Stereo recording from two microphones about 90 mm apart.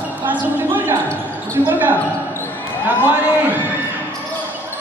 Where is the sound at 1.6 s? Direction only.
20° right (ahead or behind).